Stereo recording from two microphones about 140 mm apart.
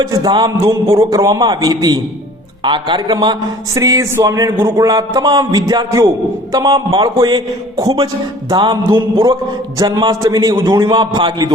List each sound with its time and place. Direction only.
0.0 s a man's voice: 25° right (ahead or behind)